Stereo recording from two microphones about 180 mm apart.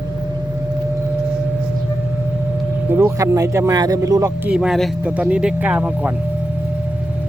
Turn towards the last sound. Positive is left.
turn(degrees=-10)  # may be behind; listen again after turning